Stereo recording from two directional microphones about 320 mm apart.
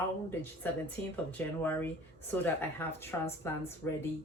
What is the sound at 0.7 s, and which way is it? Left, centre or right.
A woman's voice, centre.